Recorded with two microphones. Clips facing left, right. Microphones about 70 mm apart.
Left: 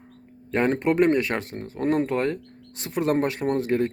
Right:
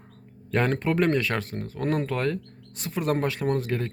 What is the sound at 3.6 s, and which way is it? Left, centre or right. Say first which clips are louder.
Speech: left 6 dB; left.